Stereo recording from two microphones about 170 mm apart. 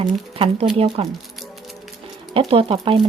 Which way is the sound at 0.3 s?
35° right (ahead or behind).